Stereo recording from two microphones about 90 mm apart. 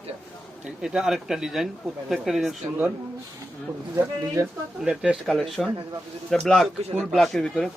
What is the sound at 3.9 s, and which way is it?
Speech, 30° right (ahead or behind).